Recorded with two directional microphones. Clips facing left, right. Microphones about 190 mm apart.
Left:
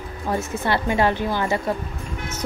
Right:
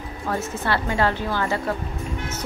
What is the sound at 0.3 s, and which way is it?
Speech, 15° left (ahead or behind).